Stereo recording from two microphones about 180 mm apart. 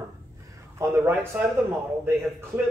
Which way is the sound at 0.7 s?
15° right (ahead or behind).